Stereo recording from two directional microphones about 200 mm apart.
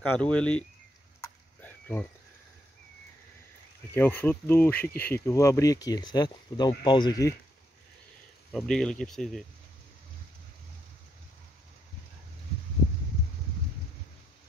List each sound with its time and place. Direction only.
0.0 s speech: 5° left (ahead or behind)
1.6 s a sound: 10° left (ahead or behind)
3.9 s speech: 10° left (ahead or behind)
8.5 s speech: 5° left (ahead or behind)